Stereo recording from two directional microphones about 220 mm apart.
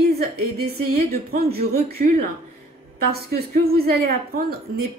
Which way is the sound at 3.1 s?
45° right (ahead or behind).